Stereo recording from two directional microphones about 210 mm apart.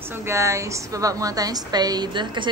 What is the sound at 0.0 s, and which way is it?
A woman's voice, 10° right (ahead or behind).